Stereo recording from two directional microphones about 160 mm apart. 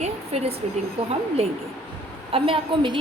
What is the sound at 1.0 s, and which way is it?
A woman's voice, 40° right (ahead or behind).